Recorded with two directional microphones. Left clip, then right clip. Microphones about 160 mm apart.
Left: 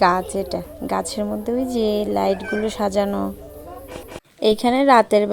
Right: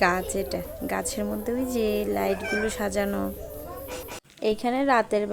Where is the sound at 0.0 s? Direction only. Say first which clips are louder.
Left 6 dB; 20° left (ahead or behind).